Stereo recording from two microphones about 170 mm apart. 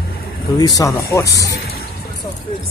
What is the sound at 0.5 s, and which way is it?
Speech, 20° left (ahead or behind).